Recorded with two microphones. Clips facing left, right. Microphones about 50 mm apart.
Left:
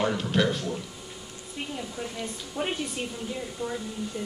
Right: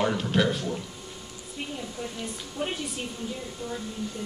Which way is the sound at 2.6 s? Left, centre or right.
Left.